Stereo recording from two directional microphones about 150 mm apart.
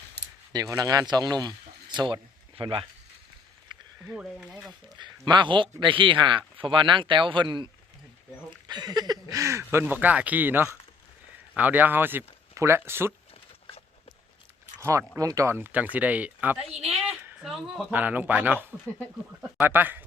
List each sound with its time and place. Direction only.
0.2 s a sound: 90° right
0.5 s speech: 25° right (ahead or behind)
3.7 s a sound: 30° right (ahead or behind)
4.0 s speech: 5° right (ahead or behind)
4.9 s speech: 30° right (ahead or behind)
14.8 s speech: 20° right (ahead or behind)